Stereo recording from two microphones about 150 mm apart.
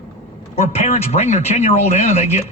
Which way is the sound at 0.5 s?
45° left (ahead or behind).